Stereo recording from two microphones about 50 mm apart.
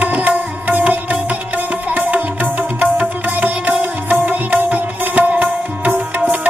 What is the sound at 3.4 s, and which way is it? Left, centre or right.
Music, right.